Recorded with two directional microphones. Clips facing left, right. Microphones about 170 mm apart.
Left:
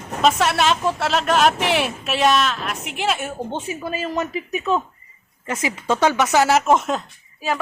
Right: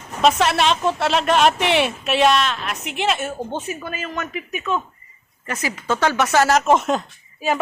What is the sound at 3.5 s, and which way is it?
Speech, 25° left (ahead or behind).